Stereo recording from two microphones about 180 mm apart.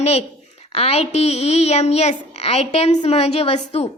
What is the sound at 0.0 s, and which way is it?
A woman's voice, 35° left (ahead or behind).